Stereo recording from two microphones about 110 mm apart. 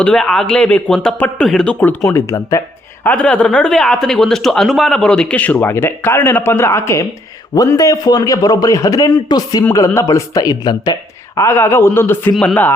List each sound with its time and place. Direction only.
0.0 s speech: 5° left (ahead or behind)
2.0 s a man's voice: 25° left (ahead or behind)
3.0 s a man's voice: 10° left (ahead or behind); by 10.9 s 40° left (ahead or behind)
11.3 s a man's voice: 25° left (ahead or behind)